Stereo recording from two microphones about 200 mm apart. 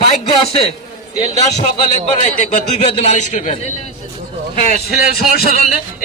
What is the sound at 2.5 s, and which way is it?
A man's voice, 35° left (ahead or behind).